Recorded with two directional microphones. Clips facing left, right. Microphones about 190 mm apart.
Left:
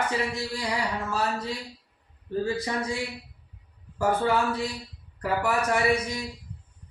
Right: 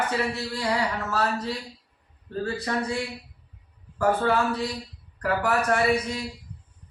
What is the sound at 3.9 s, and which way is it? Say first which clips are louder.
A man's voice: right 1 dB; 10° left (ahead or behind).